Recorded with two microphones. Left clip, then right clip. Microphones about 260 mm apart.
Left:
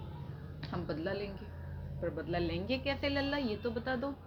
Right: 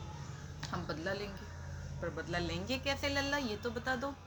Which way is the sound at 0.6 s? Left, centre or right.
Centre.